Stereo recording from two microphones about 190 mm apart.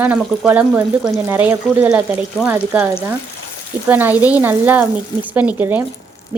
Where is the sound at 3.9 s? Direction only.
10° right (ahead or behind).